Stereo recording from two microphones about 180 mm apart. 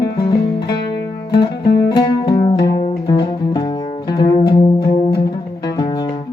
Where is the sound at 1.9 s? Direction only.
25° left (ahead or behind).